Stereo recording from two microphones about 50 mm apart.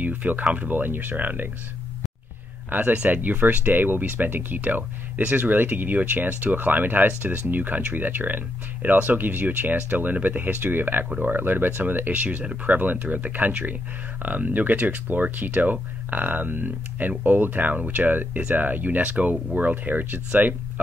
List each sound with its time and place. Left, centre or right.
0.0 s speech: right
2.7 s speech: right
11.1 s speech: right
11.3 s speech: right